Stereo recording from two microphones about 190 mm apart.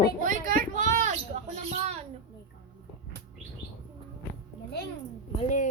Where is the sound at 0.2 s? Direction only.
45° right (ahead or behind).